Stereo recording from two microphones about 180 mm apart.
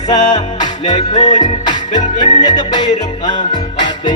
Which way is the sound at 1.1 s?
40° left (ahead or behind).